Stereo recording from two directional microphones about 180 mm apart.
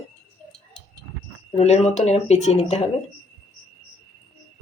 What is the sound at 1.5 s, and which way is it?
Speech, 35° left (ahead or behind).